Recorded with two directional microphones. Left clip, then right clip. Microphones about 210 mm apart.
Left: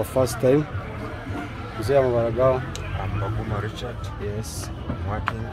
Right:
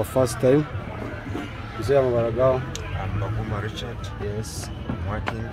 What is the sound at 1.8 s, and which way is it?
Speech, centre (ahead or behind).